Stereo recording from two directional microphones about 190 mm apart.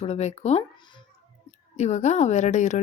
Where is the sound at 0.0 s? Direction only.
35° left (ahead or behind).